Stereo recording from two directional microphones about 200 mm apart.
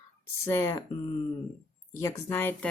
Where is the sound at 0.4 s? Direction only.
15° left (ahead or behind).